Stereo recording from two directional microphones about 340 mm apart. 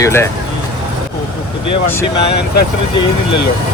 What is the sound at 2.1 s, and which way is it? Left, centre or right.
Speech, left.